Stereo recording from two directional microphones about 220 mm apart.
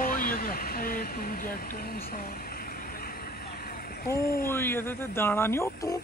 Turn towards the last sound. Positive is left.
turn(degrees=15)  # may be behind; listen again after turning